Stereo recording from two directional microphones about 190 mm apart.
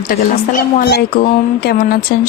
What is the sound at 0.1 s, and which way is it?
A woman's voice, 50° left (ahead or behind).